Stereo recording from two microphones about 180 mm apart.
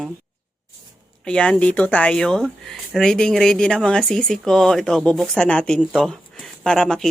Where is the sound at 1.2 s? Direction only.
5° left (ahead or behind).